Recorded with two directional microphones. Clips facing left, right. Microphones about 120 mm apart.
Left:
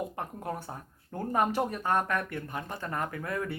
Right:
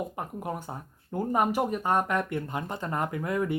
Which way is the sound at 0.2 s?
10° right (ahead or behind).